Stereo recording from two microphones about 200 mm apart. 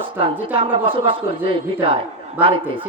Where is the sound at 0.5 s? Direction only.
25° right (ahead or behind).